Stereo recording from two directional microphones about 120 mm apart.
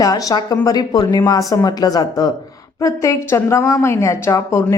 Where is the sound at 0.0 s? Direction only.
30° left (ahead or behind).